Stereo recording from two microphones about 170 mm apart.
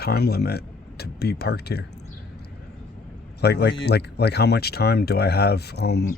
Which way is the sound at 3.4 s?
75° left (ahead or behind).